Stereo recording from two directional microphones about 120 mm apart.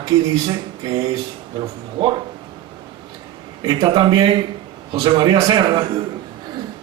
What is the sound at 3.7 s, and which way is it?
A man's voice, 40° right (ahead or behind).